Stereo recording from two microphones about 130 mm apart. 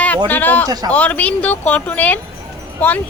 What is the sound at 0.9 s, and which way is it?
A woman's voice, 10° left (ahead or behind).